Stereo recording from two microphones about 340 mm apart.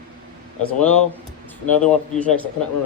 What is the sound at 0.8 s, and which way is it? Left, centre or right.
Speech, centre.